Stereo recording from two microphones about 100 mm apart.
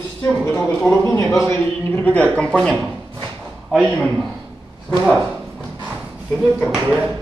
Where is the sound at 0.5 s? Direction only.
15° left (ahead or behind).